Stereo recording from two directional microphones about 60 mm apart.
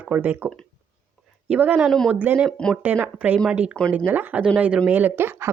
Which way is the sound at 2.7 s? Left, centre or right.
Right.